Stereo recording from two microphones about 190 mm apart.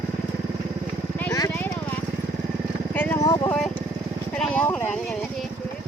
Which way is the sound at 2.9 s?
10° left (ahead or behind).